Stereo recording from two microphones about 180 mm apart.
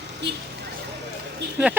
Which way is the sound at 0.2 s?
70° right (ahead or behind).